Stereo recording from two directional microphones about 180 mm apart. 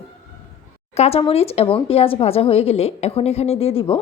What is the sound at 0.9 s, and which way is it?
Speech, 35° left (ahead or behind).